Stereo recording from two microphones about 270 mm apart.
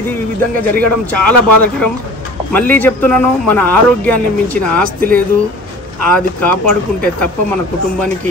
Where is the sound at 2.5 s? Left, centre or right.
Centre.